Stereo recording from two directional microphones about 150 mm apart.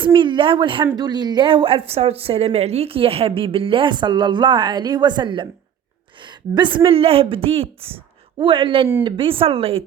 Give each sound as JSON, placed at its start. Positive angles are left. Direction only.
{"t": 0.0, "sound": "speech", "side_deg": -35}